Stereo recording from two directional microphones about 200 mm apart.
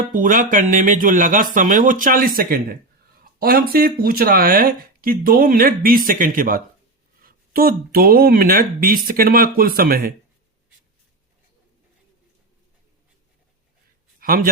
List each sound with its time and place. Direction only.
0.0 s speech: 40° right (ahead or behind)
14.2 s a man's voice: 45° right (ahead or behind)